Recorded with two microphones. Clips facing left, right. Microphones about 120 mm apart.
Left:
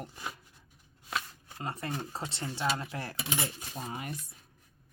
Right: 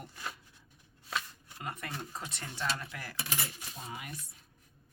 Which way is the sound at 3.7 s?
45° left (ahead or behind).